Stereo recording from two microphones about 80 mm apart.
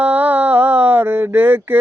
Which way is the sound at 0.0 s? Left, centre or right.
Right.